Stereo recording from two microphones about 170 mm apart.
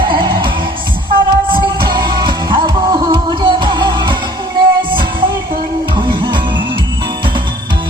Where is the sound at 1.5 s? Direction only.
25° right (ahead or behind).